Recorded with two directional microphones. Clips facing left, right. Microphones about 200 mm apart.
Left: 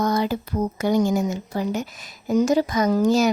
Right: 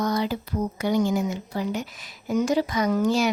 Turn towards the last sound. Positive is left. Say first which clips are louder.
# left 4 dB
turn(degrees=40)  # may be behind; listen again after turning